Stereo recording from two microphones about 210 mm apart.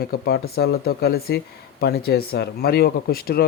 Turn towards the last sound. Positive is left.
turn(degrees=45)  # may be behind; listen again after turning